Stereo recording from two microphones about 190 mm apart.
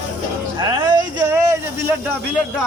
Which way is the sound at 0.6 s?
25° right (ahead or behind).